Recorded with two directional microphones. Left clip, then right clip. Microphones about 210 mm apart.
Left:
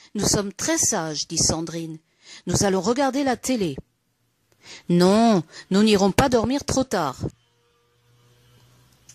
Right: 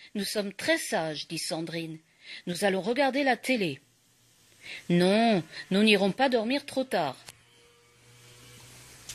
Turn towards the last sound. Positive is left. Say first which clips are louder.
# left 5 dB
turn(degrees=55)  # may be behind; listen again after turning